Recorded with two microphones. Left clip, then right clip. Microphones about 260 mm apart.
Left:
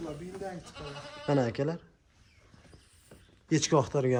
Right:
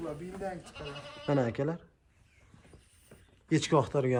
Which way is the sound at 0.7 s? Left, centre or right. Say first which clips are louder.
Even; centre.